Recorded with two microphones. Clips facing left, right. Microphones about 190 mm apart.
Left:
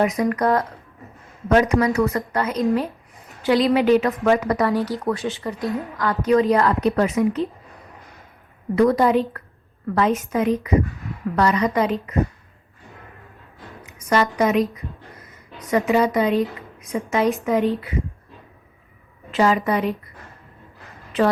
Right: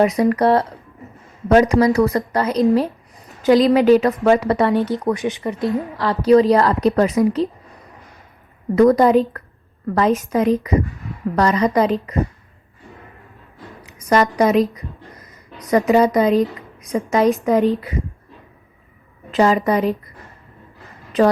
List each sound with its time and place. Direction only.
0.0 s a woman's voice: 30° right (ahead or behind)
8.7 s a woman's voice: 45° right (ahead or behind)
13.8 s a woman's voice: 35° right (ahead or behind)
15.7 s a woman's voice: 40° right (ahead or behind)
19.3 s a woman's voice: 40° right (ahead or behind)
21.1 s a woman's voice: 40° right (ahead or behind)